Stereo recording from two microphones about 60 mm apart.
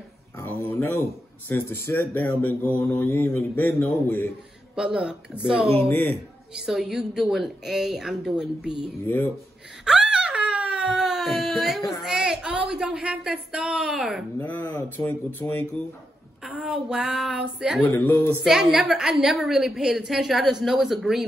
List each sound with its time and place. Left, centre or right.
1.5 s speech: left
4.7 s a woman's voice: centre
5.9 s speech: left
6.5 s a woman's voice: centre
9.0 s speech: left
9.8 s speech: centre
14.4 s speech: left
16.5 s a woman's voice: centre